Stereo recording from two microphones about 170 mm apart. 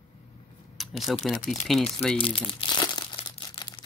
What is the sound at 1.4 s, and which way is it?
Speech, 50° left (ahead or behind).